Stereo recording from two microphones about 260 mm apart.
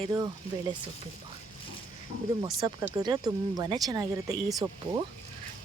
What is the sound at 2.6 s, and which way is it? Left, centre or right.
Speech, centre.